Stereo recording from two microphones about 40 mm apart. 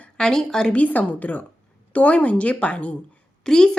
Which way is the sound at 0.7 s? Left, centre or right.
Left.